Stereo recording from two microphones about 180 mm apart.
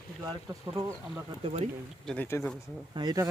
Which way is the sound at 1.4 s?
35° right (ahead or behind).